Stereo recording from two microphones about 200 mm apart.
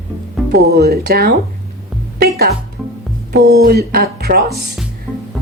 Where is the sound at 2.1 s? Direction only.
50° right (ahead or behind).